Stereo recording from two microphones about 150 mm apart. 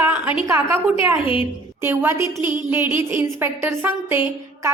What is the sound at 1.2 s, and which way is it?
Speech, 35° left (ahead or behind).